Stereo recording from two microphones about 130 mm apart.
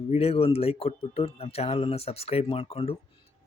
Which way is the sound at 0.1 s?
50° left (ahead or behind).